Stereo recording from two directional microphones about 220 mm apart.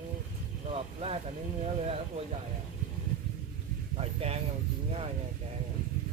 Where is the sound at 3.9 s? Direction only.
30° right (ahead or behind).